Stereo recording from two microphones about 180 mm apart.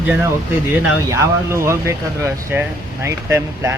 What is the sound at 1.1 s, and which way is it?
Speech, 15° right (ahead or behind).